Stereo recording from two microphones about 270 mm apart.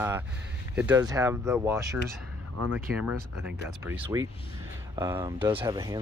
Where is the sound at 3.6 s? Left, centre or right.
Centre.